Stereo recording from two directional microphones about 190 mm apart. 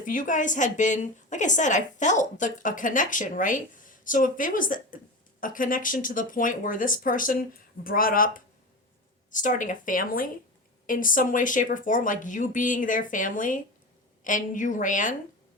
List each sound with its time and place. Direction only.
0.0 s a woman's voice: 45° left (ahead or behind)